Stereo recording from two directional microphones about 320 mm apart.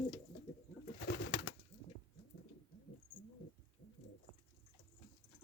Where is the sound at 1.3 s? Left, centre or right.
Left.